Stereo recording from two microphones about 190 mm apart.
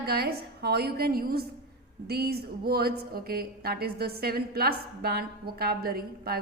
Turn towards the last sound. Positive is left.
turn(degrees=-55)  # may be behind; listen again after turning